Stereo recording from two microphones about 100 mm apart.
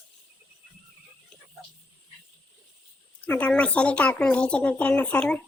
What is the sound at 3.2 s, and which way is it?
Speech, 15° left (ahead or behind).